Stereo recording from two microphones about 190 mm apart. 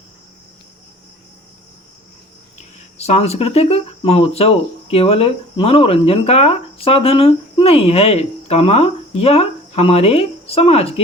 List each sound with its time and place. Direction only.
2.6 s speech: 35° left (ahead or behind)